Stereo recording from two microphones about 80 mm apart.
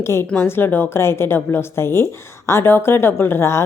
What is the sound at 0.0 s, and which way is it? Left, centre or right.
A woman's voice, left.